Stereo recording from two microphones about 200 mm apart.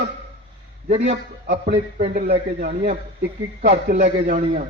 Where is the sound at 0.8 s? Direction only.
35° right (ahead or behind).